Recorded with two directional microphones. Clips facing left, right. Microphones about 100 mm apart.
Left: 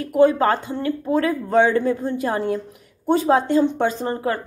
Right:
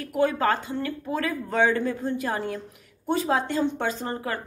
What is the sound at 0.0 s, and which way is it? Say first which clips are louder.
A woman's voice: left 7 dB; 30° left (ahead or behind).